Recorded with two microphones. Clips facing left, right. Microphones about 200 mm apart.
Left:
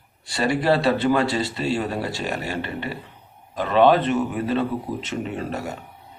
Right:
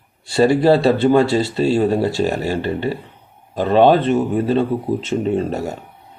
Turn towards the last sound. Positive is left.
turn(degrees=-25)  # may be behind; listen again after turning